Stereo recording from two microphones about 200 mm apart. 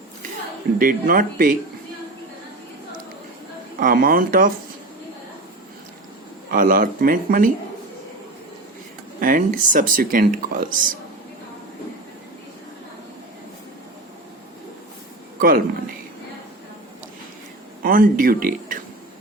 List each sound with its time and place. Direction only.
0.8 s speech: 45° right (ahead or behind)
3.8 s speech: 45° right (ahead or behind)
6.5 s speech: 45° right (ahead or behind)
9.2 s speech: 45° right (ahead or behind)
15.4 s speech: 45° right (ahead or behind)
17.8 s speech: 45° right (ahead or behind)